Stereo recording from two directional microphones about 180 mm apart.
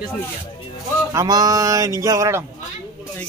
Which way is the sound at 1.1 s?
20° right (ahead or behind).